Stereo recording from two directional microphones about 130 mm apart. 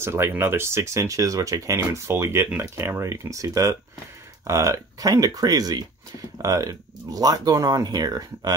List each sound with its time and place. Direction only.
0.0 s speech: 20° right (ahead or behind)